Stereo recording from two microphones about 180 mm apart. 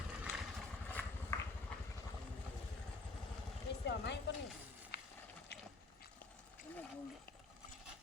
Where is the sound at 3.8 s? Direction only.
70° left (ahead or behind).